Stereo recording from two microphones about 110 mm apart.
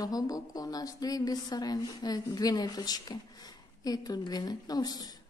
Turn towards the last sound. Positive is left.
turn(degrees=35)  # may be behind; listen again after turning